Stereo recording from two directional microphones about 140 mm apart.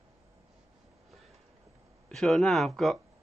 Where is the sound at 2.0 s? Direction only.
5° left (ahead or behind).